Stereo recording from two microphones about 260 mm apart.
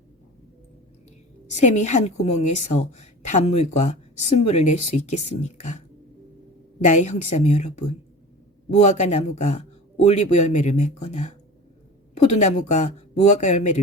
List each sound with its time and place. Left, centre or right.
1.5 s a woman's voice: left
6.8 s a woman's voice: left